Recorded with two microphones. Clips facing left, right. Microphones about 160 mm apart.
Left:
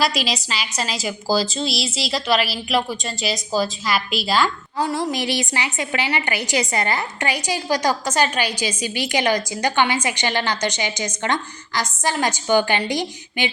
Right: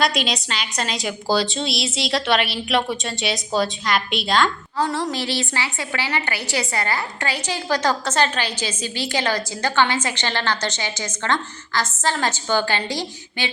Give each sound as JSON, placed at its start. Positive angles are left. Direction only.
{"t": 0.0, "sound": "a woman's voice", "side_deg": 0}